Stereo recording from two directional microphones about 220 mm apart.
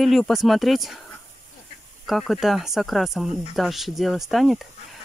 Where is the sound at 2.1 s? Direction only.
Centre (ahead or behind).